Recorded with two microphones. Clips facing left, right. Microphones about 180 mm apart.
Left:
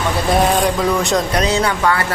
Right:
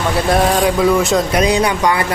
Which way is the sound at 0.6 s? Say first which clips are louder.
Right 3 dB; centre (ahead or behind).